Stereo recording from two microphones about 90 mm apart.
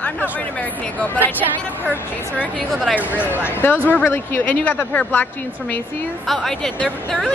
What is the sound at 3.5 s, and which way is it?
A woman's voice, 25° left (ahead or behind).